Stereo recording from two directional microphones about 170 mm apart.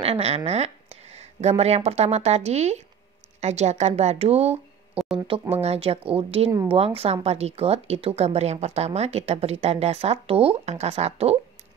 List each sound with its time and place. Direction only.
0.0 s speech: 35° right (ahead or behind)
1.1 s a sound: 40° right (ahead or behind)
1.9 s speech: 40° right (ahead or behind)